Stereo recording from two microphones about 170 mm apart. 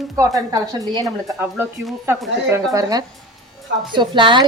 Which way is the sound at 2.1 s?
15° right (ahead or behind).